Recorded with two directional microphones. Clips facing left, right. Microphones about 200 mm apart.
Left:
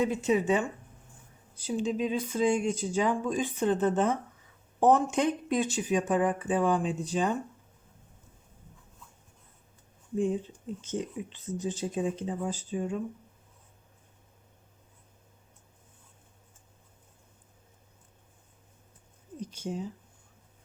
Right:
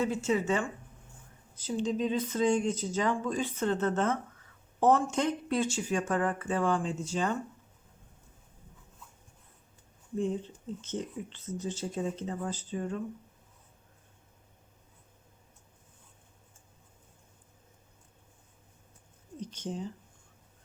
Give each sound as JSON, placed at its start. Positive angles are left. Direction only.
{"t": 0.0, "sound": "speech", "side_deg": 15}
{"t": 10.8, "sound": "speech", "side_deg": 10}
{"t": 19.4, "sound": "speech", "side_deg": 10}